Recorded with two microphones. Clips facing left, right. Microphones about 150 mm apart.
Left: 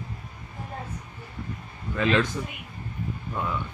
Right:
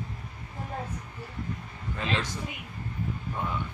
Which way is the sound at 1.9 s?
75° left (ahead or behind).